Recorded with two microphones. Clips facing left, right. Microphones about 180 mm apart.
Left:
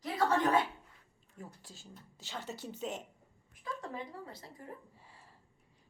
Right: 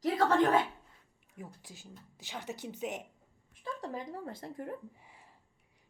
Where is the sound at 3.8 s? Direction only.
40° right (ahead or behind); by 4.7 s 60° right (ahead or behind).